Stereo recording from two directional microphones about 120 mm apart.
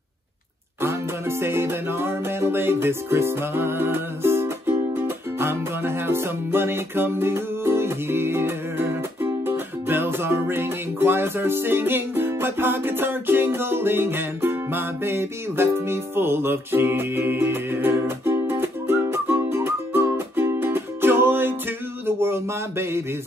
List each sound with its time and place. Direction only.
0.7 s music: 20° right (ahead or behind)